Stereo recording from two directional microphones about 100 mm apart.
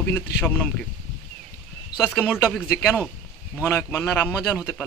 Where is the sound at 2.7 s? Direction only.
5° right (ahead or behind).